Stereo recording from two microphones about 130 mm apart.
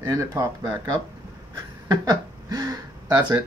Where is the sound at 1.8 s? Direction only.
30° right (ahead or behind).